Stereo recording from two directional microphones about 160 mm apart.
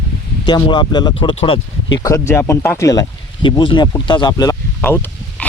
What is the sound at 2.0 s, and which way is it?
Speech, 20° left (ahead or behind).